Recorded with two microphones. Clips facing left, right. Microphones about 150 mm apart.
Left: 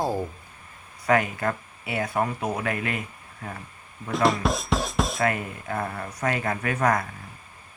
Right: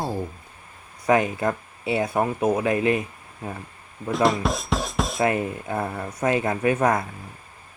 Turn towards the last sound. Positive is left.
turn(degrees=-25)  # may be behind; listen again after turning